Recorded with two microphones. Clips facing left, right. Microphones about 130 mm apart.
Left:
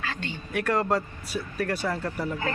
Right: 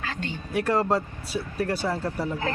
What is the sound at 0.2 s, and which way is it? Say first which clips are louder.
Speech: right 2 dB; 35° right (ahead or behind).